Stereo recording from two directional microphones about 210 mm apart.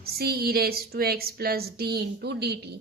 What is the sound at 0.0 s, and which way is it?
A woman's voice, 45° right (ahead or behind).